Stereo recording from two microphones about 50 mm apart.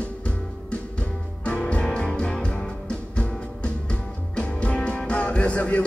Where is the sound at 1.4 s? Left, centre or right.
Left.